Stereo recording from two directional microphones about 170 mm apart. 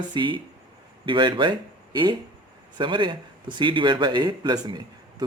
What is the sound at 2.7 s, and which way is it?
Speech, 30° right (ahead or behind).